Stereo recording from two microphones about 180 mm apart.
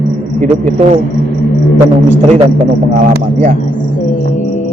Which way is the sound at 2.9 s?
50° right (ahead or behind).